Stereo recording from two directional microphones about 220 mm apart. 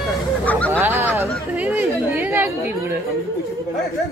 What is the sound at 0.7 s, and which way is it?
Speech, 10° right (ahead or behind).